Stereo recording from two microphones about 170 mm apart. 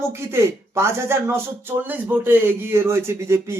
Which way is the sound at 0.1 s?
15° right (ahead or behind).